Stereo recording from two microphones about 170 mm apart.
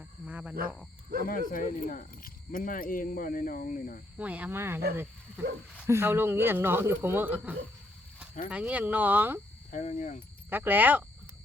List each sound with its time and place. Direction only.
0.3 s speech: 10° right (ahead or behind)
1.2 s cricket: 55° left (ahead or behind)
4.2 s speech: 10° right (ahead or behind)
9.7 s speech: 45° left (ahead or behind)
10.5 s speech: 10° right (ahead or behind)